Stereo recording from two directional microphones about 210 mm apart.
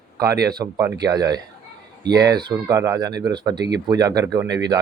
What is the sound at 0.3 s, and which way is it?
Speech, 50° right (ahead or behind).